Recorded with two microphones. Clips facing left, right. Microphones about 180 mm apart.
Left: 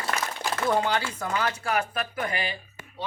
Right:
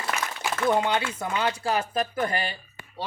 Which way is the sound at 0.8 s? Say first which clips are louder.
Right 1 dB; 20° right (ahead or behind).